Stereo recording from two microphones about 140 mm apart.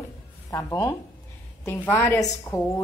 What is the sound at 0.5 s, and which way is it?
A woman's voice, 20° left (ahead or behind).